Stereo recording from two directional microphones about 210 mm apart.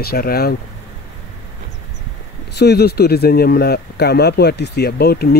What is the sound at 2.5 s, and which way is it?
Speech, 50° left (ahead or behind).